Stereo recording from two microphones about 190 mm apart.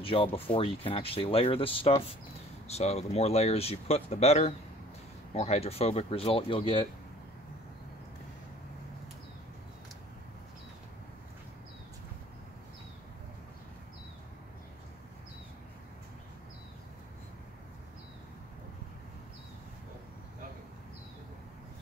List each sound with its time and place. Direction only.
0.0 s speech: 30° left (ahead or behind)